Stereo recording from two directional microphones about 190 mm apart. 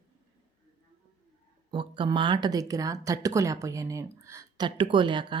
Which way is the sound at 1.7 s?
25° right (ahead or behind).